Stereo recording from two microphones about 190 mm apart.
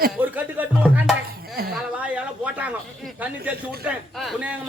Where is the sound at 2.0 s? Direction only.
5° right (ahead or behind).